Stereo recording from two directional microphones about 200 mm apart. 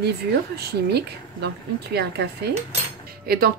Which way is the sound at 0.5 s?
55° right (ahead or behind).